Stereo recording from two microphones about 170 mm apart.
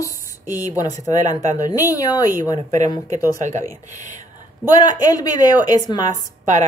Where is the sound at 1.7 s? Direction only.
20° left (ahead or behind).